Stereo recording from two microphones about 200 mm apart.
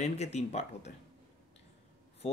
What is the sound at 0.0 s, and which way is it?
Speech, 35° left (ahead or behind).